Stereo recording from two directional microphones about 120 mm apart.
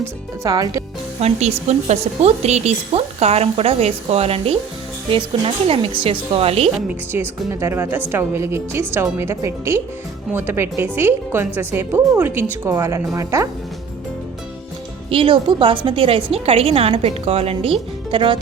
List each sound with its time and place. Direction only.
0.4 s a woman's voice: 30° right (ahead or behind)
1.2 s speech: 65° right (ahead or behind)
5.6 s a woman's voice: 50° right (ahead or behind)
7.1 s a woman's voice: 20° right (ahead or behind)
15.1 s a woman's voice: 45° right (ahead or behind)